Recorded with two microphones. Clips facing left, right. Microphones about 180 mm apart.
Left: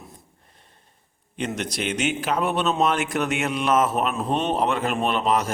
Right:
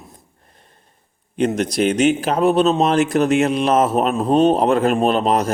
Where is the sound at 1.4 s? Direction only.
35° right (ahead or behind).